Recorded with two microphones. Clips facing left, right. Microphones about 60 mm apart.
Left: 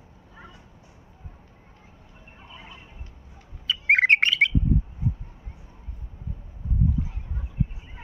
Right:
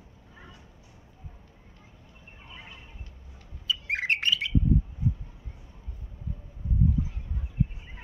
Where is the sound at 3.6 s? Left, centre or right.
Left.